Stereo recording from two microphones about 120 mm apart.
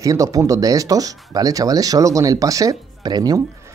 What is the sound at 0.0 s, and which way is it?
Speech, 30° right (ahead or behind).